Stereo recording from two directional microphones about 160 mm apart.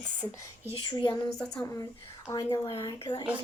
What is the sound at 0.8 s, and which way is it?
Speech, 30° left (ahead or behind).